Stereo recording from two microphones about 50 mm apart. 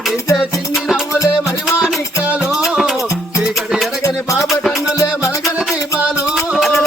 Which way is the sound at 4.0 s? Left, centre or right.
Left.